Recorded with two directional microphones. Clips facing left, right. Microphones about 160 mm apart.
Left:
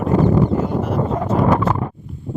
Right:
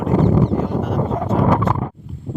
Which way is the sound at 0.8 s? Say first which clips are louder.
Left 1 dB; centre (ahead or behind).